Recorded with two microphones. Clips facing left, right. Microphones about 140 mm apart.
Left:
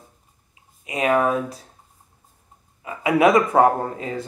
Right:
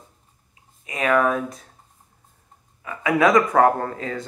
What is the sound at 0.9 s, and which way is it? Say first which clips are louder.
Speech: left 1 dB; 30° left (ahead or behind).